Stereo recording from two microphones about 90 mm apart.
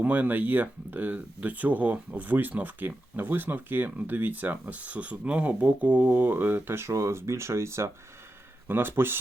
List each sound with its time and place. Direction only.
0.0 s speech: 20° right (ahead or behind)